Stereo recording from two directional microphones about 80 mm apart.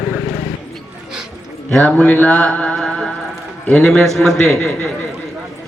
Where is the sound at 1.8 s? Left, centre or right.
Centre.